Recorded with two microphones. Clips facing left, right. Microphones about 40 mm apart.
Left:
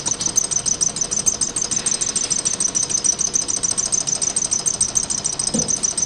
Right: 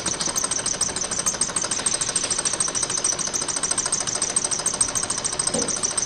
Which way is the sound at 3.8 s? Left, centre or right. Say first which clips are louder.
Left 1 dB; right.